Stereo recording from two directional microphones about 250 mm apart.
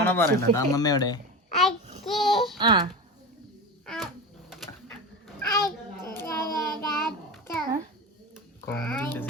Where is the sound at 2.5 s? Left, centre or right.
Centre.